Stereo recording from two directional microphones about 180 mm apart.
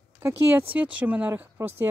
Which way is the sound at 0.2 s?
10° right (ahead or behind).